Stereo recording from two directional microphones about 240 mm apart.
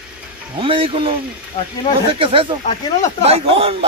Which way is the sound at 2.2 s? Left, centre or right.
Right.